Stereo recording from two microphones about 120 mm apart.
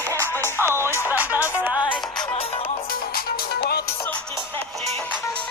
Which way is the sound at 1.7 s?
35° left (ahead or behind).